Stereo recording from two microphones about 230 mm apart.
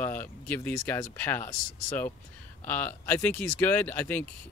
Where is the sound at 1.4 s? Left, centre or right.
Left.